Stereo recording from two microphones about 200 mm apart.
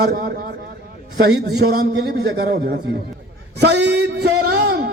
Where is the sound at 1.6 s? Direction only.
55° right (ahead or behind).